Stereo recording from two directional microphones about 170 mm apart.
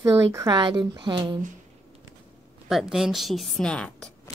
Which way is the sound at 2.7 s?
Centre (ahead or behind).